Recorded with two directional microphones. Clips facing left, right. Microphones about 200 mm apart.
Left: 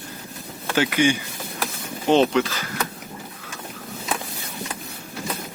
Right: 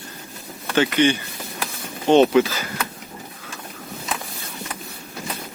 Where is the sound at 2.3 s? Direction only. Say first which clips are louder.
Right 4 dB; 10° right (ahead or behind).